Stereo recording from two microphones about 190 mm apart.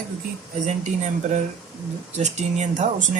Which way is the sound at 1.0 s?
40° right (ahead or behind).